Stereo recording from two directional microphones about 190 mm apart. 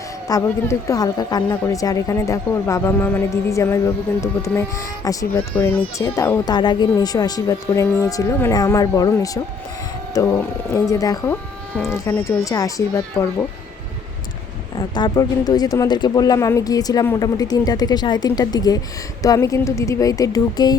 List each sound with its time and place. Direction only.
0.3 s a woman's voice: 15° left (ahead or behind)
14.8 s a woman's voice: 20° left (ahead or behind)